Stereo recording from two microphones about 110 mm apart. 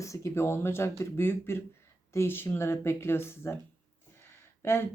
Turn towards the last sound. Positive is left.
turn(degrees=20)  # may be behind; listen again after turning